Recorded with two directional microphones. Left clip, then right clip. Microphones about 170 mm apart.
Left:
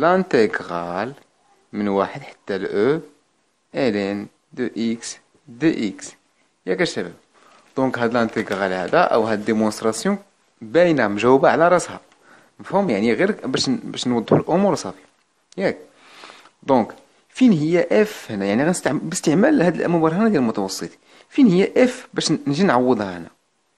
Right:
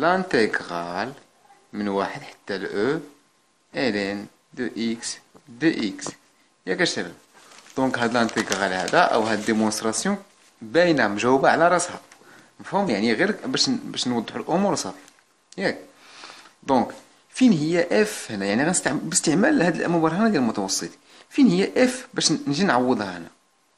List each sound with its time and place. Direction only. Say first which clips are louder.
0.0 s speech: left 4 dB; 35° left (ahead or behind)
15.5 s a sound: left 3 dB; 35° left (ahead or behind)
17.3 s speech: left 3 dB; 35° left (ahead or behind)